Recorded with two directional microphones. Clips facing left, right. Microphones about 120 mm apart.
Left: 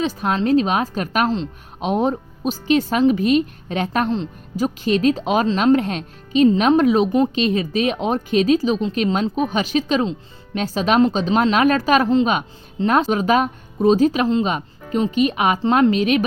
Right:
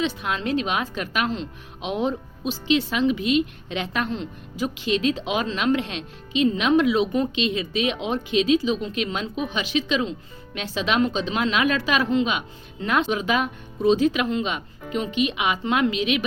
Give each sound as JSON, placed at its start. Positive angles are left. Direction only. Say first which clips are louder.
{"t": 0.0, "sound": "speech", "louder": "left 5 dB", "side_deg": 40}